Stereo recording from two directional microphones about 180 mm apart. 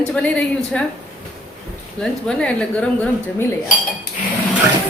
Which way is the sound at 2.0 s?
5° left (ahead or behind).